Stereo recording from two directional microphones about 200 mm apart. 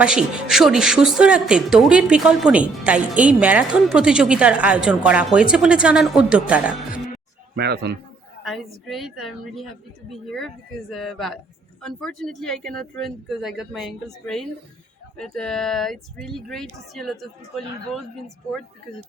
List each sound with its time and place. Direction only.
0.0 s speech: 5° right (ahead or behind)
7.5 s speech: 55° right (ahead or behind)
8.4 s speech: centre (ahead or behind)